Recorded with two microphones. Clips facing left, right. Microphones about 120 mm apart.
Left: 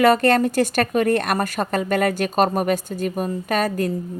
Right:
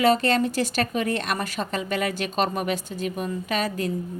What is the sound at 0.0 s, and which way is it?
A woman's voice, 55° left (ahead or behind).